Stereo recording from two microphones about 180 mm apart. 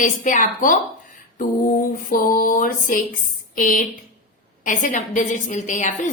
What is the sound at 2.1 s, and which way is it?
A woman's voice, 50° left (ahead or behind).